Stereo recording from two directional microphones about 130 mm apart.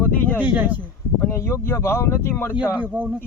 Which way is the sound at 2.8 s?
15° right (ahead or behind).